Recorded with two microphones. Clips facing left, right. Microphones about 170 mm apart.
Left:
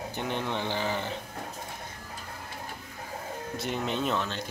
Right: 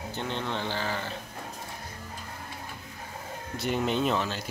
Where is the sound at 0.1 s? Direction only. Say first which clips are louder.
Even; 15° left (ahead or behind).